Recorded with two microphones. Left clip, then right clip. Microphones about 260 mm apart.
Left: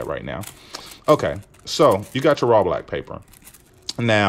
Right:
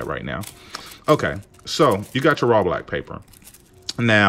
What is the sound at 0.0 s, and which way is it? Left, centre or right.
Speech, centre.